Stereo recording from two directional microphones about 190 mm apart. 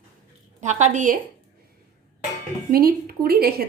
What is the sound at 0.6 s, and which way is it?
Speech, 40° right (ahead or behind).